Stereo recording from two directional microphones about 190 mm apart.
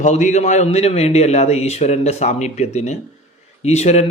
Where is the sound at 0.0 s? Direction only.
40° left (ahead or behind).